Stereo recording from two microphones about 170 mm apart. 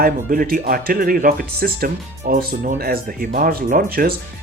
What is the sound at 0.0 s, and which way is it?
Speech, 60° right (ahead or behind).